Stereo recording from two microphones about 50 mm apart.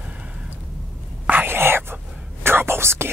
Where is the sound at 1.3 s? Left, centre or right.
Right.